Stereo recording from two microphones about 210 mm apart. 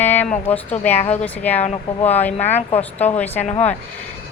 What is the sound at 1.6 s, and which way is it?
Speech, 30° left (ahead or behind).